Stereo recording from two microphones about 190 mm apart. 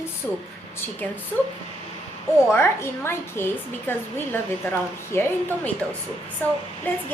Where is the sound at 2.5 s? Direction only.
15° left (ahead or behind).